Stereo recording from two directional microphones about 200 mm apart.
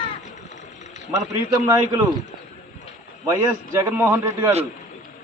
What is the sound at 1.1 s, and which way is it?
Speech, 15° right (ahead or behind).